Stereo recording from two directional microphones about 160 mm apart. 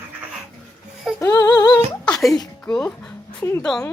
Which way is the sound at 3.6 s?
5° left (ahead or behind).